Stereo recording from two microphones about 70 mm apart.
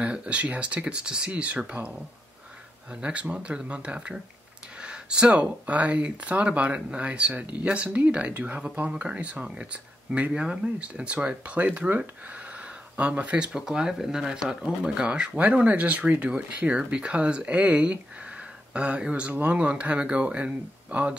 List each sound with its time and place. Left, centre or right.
0.0 s speech: centre
2.9 s speech: centre